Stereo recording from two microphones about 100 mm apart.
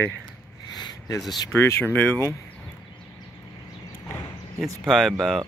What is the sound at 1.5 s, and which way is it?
Speech, 25° left (ahead or behind).